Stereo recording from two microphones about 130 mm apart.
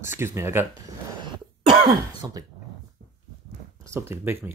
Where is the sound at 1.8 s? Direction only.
30° right (ahead or behind).